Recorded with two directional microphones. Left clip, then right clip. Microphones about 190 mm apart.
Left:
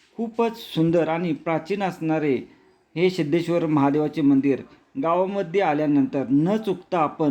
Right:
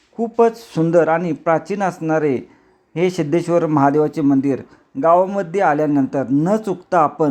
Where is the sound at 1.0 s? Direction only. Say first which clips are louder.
Right 8 dB; 10° right (ahead or behind).